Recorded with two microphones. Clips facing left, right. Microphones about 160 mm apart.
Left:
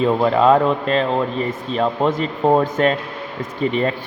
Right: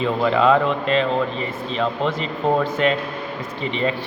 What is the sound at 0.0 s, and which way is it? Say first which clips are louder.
Speech: left 3 dB; 40° left (ahead or behind).